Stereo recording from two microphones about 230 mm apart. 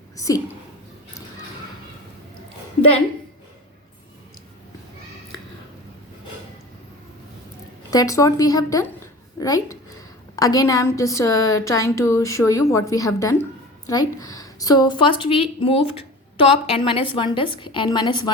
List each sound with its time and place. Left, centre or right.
0.2 s a woman's voice: centre
7.9 s a woman's voice: centre